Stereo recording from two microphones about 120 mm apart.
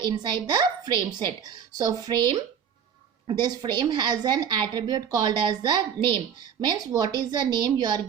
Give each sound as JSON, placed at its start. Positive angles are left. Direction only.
{"t": 0.0, "sound": "a woman's voice", "side_deg": -40}